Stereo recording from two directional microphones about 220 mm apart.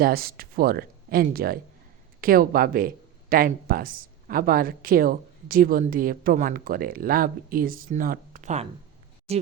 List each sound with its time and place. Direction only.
0.0 s speech: 45° right (ahead or behind)